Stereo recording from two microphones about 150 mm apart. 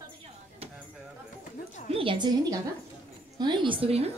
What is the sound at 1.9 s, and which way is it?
A woman's voice, 35° right (ahead or behind).